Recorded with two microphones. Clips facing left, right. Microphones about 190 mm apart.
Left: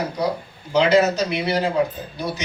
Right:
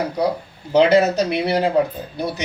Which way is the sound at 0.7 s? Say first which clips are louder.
Right 2 dB; 60° right (ahead or behind).